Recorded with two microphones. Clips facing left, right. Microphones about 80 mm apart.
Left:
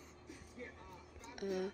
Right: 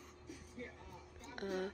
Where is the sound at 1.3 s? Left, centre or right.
Right.